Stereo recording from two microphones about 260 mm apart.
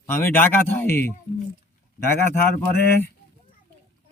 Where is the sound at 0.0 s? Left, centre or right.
Centre.